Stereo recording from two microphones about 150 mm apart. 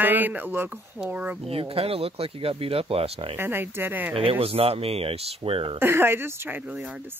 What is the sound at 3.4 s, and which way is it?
Speech, 15° right (ahead or behind).